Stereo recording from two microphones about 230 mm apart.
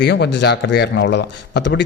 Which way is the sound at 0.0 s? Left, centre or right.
Left.